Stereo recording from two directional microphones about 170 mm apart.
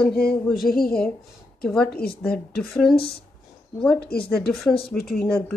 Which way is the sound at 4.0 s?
65° left (ahead or behind).